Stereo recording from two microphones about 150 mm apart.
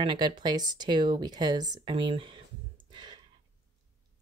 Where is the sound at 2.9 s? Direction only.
30° right (ahead or behind).